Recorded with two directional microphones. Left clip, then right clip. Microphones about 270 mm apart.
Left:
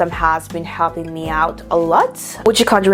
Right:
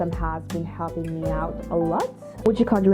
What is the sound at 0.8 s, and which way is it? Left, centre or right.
Speech, left.